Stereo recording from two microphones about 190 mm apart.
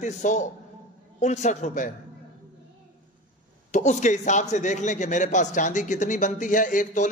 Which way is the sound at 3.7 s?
40° left (ahead or behind).